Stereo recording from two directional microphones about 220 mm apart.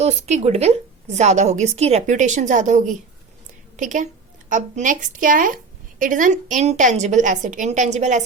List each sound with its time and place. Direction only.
0.0 s a woman's voice: 30° right (ahead or behind)